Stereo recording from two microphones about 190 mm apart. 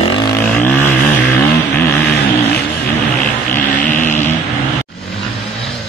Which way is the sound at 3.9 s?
40° left (ahead or behind).